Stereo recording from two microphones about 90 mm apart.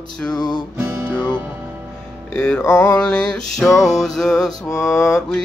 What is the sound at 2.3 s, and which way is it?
Music, 10° left (ahead or behind).